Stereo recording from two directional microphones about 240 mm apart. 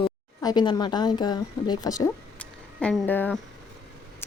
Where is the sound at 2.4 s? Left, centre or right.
Centre.